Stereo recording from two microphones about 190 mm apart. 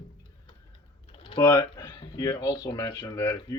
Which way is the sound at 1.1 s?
25° left (ahead or behind).